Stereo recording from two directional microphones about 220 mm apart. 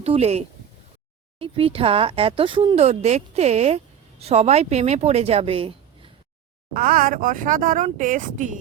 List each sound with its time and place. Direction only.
0.0 s speech: 30° right (ahead or behind)
6.7 s speech: 40° right (ahead or behind)